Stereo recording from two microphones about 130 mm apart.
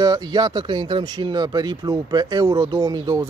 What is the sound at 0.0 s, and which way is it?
Speech, 30° right (ahead or behind).